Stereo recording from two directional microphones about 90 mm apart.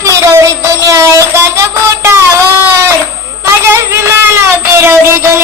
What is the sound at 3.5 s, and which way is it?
Music, 30° right (ahead or behind).